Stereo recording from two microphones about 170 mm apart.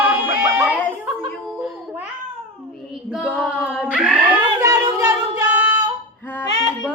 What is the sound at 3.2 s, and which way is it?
Female singing, 5° left (ahead or behind).